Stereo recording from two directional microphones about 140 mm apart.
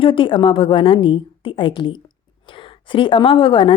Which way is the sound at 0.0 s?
40° left (ahead or behind).